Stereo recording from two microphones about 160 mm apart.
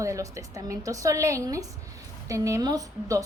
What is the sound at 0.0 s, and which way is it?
A woman's voice, 20° right (ahead or behind).